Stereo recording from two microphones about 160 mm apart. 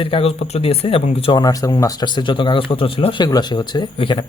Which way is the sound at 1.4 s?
20° left (ahead or behind).